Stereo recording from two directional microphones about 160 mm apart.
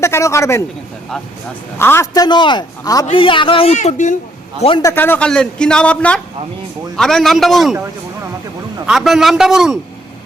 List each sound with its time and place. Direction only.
0.0 s speech: 20° left (ahead or behind)
1.8 s a man's voice: 15° left (ahead or behind); by 3.8 s 35° left (ahead or behind)
3.8 s a man's voice: 50° left (ahead or behind)
4.8 s a man's voice: 15° left (ahead or behind); by 7.8 s centre (ahead or behind)
8.9 s a man's voice: centre (ahead or behind)